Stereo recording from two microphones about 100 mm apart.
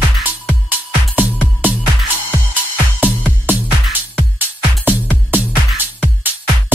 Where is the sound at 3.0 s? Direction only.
15° right (ahead or behind).